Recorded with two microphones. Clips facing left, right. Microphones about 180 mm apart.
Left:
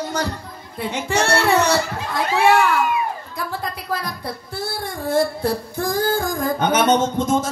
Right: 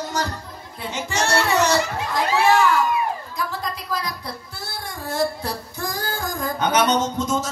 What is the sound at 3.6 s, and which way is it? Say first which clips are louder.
Speech: left 1 dB; 55° left (ahead or behind).